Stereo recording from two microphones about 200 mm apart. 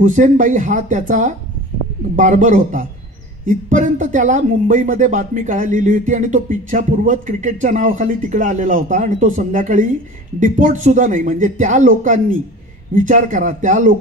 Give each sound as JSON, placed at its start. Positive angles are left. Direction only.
{"t": 0.0, "sound": "speech", "side_deg": -40}